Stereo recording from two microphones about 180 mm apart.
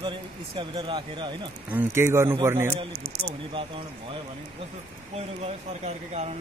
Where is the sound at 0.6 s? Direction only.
25° right (ahead or behind).